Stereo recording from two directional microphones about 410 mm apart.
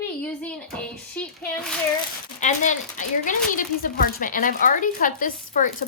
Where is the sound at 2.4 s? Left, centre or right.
Centre.